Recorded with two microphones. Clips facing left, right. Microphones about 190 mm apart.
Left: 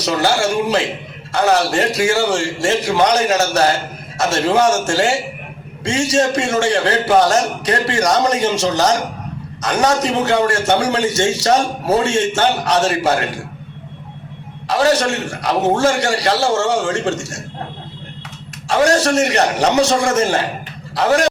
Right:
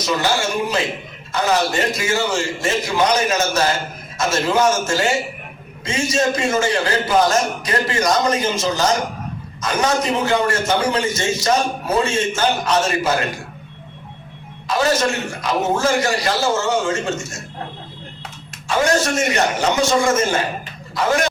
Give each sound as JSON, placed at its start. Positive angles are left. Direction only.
{"t": 0.3, "sound": "a man's voice", "side_deg": 70}
{"t": 14.7, "sound": "a man's voice", "side_deg": 75}
{"t": 18.7, "sound": "a man's voice", "side_deg": 70}